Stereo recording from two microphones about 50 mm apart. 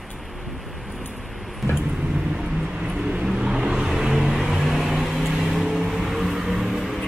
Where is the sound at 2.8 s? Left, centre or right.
Centre.